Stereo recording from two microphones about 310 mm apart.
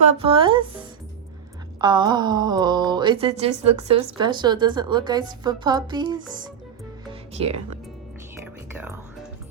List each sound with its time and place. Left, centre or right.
0.2 s a woman's voice: centre